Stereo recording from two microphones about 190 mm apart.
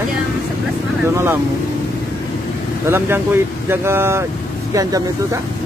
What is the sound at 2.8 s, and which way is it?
Speech, 10° right (ahead or behind).